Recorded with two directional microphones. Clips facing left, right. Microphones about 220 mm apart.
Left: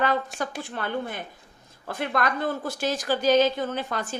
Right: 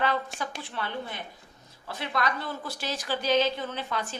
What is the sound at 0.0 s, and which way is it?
A woman's voice, 45° left (ahead or behind).